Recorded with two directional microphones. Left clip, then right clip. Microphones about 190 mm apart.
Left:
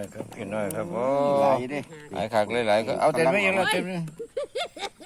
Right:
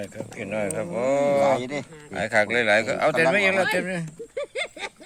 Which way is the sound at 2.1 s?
Centre (ahead or behind).